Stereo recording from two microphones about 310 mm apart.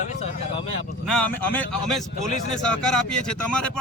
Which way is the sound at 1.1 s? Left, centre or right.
Centre.